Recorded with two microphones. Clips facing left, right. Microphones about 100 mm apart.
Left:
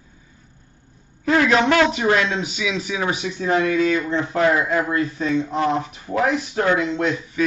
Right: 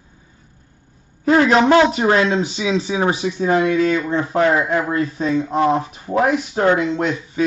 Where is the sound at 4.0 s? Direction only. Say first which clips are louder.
Right 2 dB; 40° right (ahead or behind).